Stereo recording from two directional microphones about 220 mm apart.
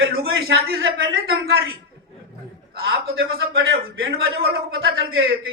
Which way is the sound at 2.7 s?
45° right (ahead or behind).